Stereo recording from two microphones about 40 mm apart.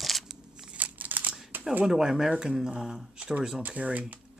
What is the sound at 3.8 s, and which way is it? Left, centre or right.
Speech, right.